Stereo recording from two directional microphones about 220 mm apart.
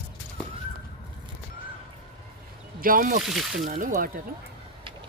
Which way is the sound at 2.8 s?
40° right (ahead or behind).